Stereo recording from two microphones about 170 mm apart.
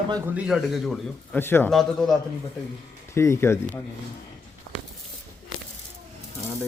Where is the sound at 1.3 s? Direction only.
15° left (ahead or behind).